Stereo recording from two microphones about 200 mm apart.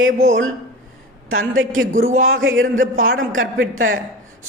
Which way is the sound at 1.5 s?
80° right.